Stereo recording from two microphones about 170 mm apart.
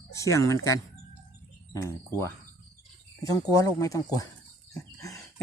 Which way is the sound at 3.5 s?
20° left (ahead or behind).